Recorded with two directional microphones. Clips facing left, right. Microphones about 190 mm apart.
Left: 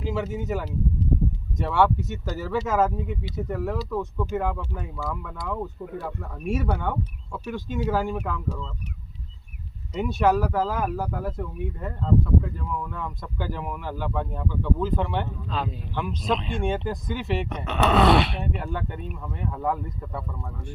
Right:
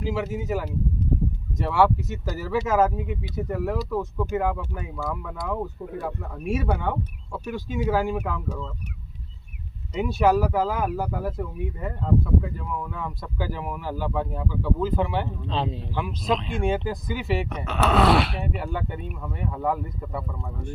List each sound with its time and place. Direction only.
0.0 s speech: 5° right (ahead or behind)
9.9 s speech: 5° right (ahead or behind)
15.4 s speech: 25° right (ahead or behind)
16.0 s speech: 5° right (ahead or behind)